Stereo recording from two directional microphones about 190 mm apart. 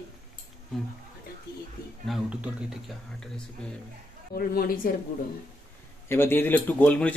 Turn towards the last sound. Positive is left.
turn(degrees=10)  # may be behind; listen again after turning